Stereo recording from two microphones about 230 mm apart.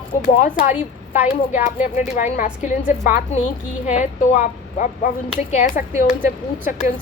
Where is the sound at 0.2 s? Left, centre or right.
Left.